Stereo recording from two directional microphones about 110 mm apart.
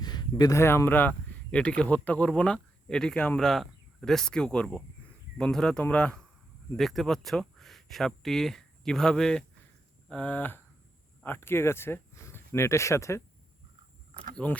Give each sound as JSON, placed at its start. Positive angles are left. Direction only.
{"t": 0.0, "sound": "speech", "side_deg": 40}
{"t": 14.3, "sound": "speech", "side_deg": 10}